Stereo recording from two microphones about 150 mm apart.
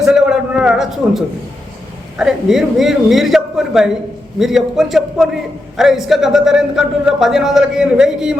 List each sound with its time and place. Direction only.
0.0 s a man's voice: 5° right (ahead or behind)